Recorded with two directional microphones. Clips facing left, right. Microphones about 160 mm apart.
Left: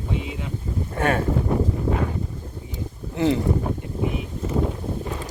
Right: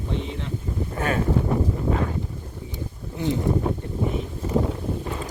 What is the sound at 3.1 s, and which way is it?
Speech, 90° left.